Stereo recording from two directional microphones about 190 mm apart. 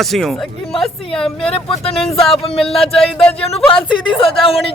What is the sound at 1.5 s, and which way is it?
Speech, 30° left (ahead or behind).